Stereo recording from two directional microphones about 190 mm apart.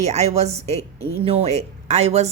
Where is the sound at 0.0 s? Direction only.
35° right (ahead or behind).